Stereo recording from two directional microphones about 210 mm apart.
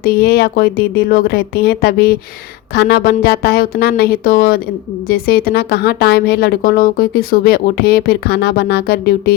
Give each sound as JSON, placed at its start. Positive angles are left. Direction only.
{"t": 0.0, "sound": "a woman's voice", "side_deg": 50}